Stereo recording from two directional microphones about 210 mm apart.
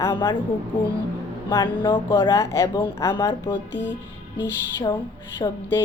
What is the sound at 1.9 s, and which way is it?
Speech, 10° left (ahead or behind).